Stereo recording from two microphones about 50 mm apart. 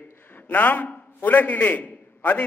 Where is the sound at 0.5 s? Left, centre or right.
Left.